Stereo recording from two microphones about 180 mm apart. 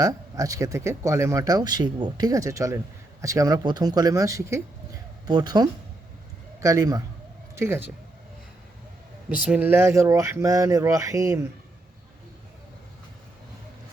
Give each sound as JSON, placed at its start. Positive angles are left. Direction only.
{"t": 0.0, "sound": "speech", "side_deg": -20}
{"t": 9.5, "sound": "speech", "side_deg": -10}